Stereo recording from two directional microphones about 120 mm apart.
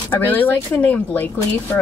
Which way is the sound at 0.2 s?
15° left (ahead or behind).